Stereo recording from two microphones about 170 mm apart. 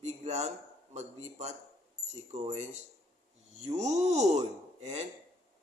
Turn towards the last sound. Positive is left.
turn(degrees=-40)  # may be behind; listen again after turning